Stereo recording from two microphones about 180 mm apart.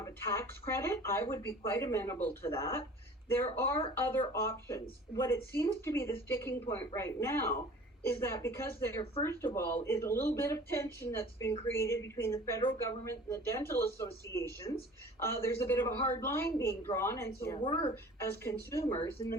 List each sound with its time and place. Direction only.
0.0 s a woman's voice: 15° left (ahead or behind)
17.6 s a woman's voice: 30° left (ahead or behind)
18.2 s a woman's voice: 15° left (ahead or behind)